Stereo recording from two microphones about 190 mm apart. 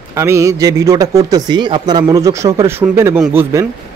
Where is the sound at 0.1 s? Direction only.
15° right (ahead or behind).